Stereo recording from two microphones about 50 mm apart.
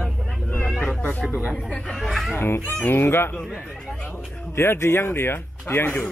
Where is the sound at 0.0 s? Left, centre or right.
Left.